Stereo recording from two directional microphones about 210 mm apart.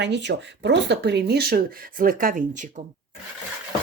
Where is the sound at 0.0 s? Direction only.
55° right (ahead or behind); by 2.8 s 35° right (ahead or behind).